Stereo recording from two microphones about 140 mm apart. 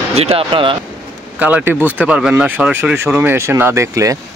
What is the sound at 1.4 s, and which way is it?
Speech, 10° right (ahead or behind).